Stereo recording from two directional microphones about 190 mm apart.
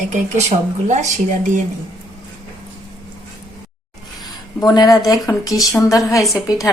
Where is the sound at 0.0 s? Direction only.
40° right (ahead or behind).